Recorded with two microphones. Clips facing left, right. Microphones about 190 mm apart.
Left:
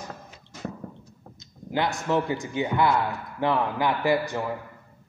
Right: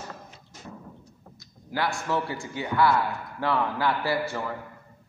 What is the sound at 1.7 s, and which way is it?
A man's voice, 20° left (ahead or behind).